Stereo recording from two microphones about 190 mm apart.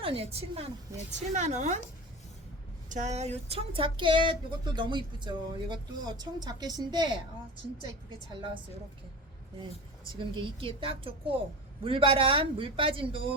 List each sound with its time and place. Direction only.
0.0 s a woman's voice: 30° right (ahead or behind)
2.9 s speech: 35° right (ahead or behind); by 7.2 s 20° right (ahead or behind)
10.2 s speech: 25° right (ahead or behind)